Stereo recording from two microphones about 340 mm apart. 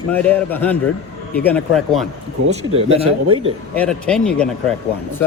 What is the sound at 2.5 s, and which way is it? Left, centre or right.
Speech, centre.